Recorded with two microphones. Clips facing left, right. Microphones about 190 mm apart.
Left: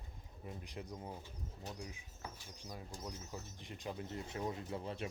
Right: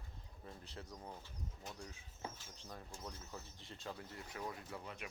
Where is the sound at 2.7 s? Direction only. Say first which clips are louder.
Left 3 dB; 15° left (ahead or behind).